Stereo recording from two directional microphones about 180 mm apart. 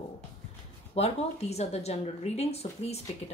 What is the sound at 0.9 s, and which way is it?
Speech, 35° left (ahead or behind).